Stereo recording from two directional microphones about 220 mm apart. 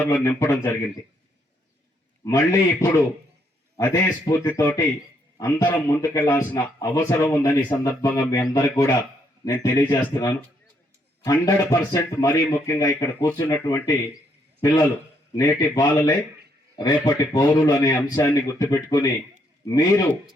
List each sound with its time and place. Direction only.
0.0 s a man's voice: 10° left (ahead or behind)
2.2 s a man's voice: 15° left (ahead or behind)
15.4 s a man's voice: 15° left (ahead or behind)